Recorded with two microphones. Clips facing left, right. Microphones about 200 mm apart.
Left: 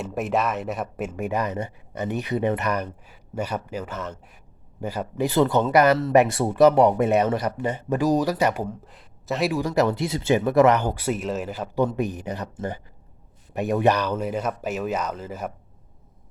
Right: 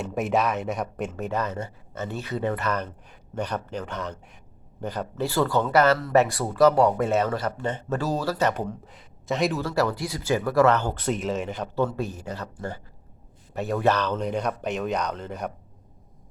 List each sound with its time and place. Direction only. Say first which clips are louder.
0.0 s speech: even; centre (ahead or behind)
9.6 s speech: left 3 dB; 20° left (ahead or behind)
11.8 s speech: left 3 dB; 15° left (ahead or behind)